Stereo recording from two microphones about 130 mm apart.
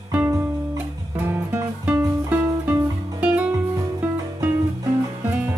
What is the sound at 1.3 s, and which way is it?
Music, 15° right (ahead or behind).